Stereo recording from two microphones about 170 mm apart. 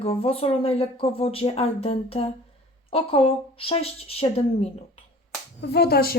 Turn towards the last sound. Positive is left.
turn(degrees=65)  # may be behind; listen again after turning